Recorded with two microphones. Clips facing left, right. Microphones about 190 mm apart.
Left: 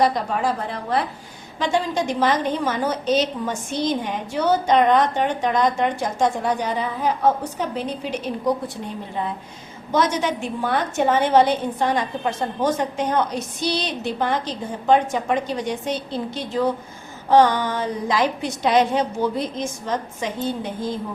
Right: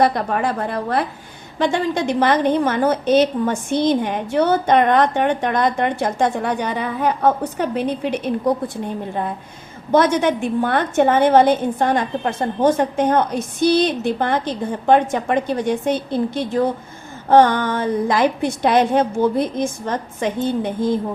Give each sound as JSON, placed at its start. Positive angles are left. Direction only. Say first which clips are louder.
{"t": 0.0, "sound": "a woman's voice", "louder": "right 3 dB", "side_deg": -55}
{"t": 9.9, "sound": "a woman's voice", "louder": "right 5 dB", "side_deg": -55}